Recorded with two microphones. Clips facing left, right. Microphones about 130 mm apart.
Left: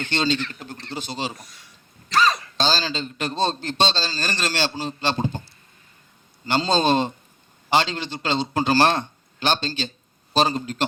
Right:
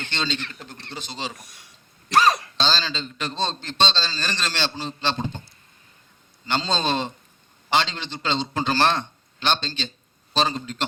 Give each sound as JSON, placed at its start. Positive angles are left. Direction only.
{"t": 0.0, "sound": "a man's voice", "side_deg": 45}
{"t": 2.6, "sound": "a man's voice", "side_deg": 45}
{"t": 6.4, "sound": "a man's voice", "side_deg": 45}